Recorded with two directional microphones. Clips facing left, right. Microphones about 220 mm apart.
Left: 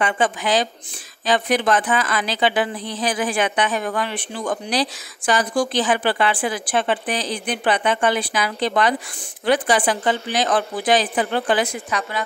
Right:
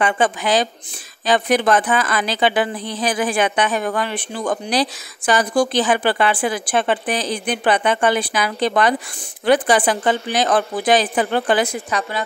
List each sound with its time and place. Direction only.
0.0 s speech: 50° right (ahead or behind)